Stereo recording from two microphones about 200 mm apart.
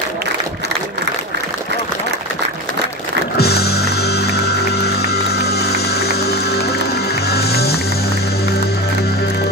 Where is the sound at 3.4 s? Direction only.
55° left (ahead or behind).